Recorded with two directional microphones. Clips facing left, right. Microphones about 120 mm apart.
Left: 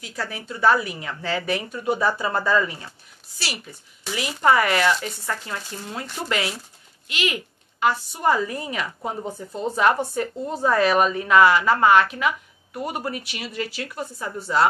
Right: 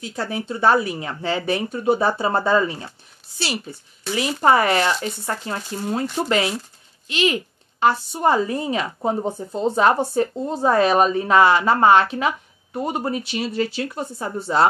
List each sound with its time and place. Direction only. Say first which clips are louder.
0.0 s a woman's voice: right 5 dB; 25° right (ahead or behind)